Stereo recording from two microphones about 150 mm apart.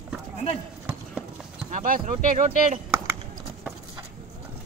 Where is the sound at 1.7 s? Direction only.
60° right (ahead or behind).